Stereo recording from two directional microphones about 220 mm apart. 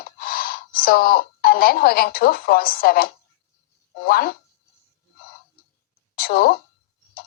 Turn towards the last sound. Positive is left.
turn(degrees=45)  # may be behind; listen again after turning